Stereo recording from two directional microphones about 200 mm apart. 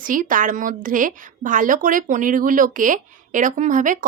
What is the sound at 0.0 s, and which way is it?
Speech, 40° right (ahead or behind).